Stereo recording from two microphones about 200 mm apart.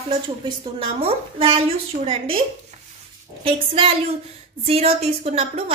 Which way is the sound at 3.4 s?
25° right (ahead or behind).